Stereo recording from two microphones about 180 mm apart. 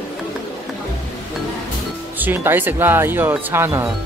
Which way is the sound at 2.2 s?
10° right (ahead or behind).